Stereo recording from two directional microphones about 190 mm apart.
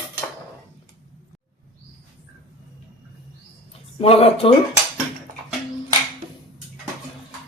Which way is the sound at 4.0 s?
30° left (ahead or behind).